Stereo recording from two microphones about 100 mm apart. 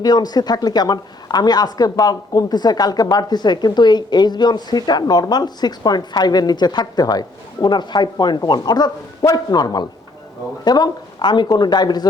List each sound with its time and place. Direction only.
0.0 s speech: 40° left (ahead or behind)